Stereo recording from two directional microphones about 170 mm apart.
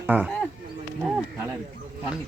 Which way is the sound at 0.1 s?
10° right (ahead or behind).